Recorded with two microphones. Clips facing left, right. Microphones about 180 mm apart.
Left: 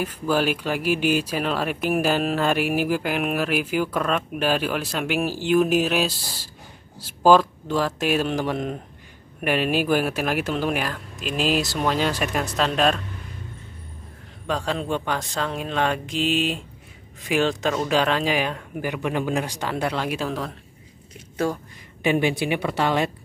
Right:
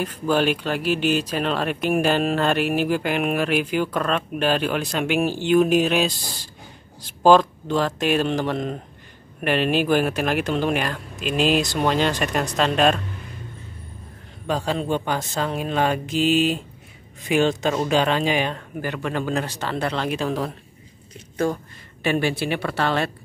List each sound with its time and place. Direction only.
0.0 s speech: 5° left (ahead or behind)
14.5 s speech: centre (ahead or behind)
22.0 s speech: 15° left (ahead or behind)